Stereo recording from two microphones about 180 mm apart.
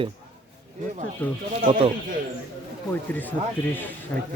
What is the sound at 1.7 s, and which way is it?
Speech, 50° right (ahead or behind).